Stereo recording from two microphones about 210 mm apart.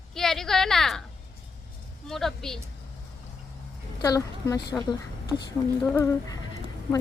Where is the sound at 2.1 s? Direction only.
Centre (ahead or behind).